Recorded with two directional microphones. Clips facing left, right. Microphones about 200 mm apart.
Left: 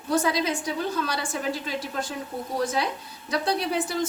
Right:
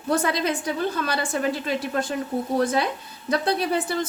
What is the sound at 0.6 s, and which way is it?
A woman's voice, 60° right (ahead or behind).